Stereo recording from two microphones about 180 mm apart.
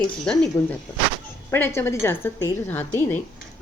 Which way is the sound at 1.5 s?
15° left (ahead or behind).